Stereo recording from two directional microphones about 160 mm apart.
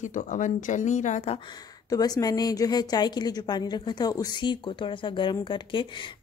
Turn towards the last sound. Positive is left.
turn(degrees=30)  # may be behind; listen again after turning